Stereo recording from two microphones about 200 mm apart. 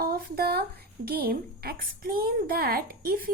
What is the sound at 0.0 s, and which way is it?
A woman's voice, 50° right (ahead or behind).